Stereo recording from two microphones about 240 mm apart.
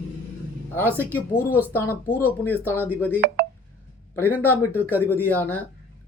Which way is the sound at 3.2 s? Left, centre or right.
Right.